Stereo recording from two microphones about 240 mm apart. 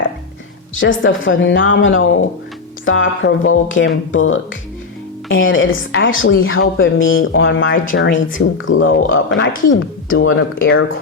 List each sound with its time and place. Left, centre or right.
0.8 s speech: left
8.1 s speech: left
8.6 s speech: left